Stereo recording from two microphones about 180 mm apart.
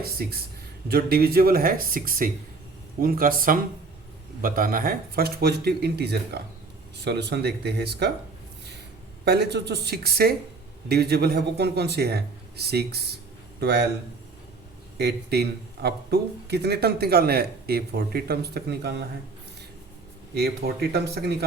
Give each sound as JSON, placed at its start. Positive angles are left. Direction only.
{"t": 0.0, "sound": "speech", "side_deg": -60}
{"t": 9.2, "sound": "speech", "side_deg": -65}
{"t": 14.9, "sound": "speech", "side_deg": -65}
{"t": 20.3, "sound": "speech", "side_deg": -60}